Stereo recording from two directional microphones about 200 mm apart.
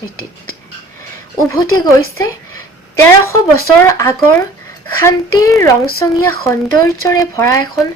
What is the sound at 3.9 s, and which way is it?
A woman's voice, 15° left (ahead or behind).